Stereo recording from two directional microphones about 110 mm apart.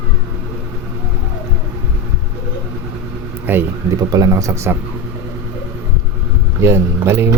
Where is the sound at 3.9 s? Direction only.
30° right (ahead or behind).